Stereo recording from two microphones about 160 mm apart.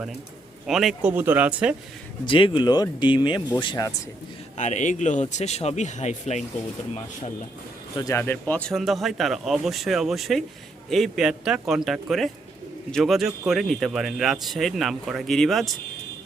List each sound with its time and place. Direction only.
0.7 s speech: centre (ahead or behind)
1.1 s speech: 10° right (ahead or behind)
2.2 s speech: 30° left (ahead or behind)
4.5 s speech: 50° left (ahead or behind)
7.9 s speech: 20° left (ahead or behind); by 15.8 s centre (ahead or behind)